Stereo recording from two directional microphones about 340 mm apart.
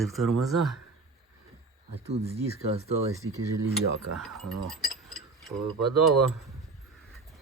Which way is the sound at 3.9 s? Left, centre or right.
Right.